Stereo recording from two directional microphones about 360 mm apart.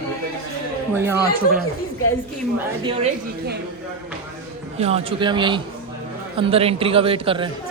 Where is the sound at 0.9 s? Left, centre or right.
Centre.